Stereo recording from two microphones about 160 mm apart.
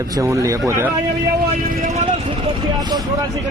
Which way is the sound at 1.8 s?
45° right (ahead or behind).